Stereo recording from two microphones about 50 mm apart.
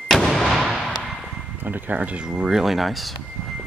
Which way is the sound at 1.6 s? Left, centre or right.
Right.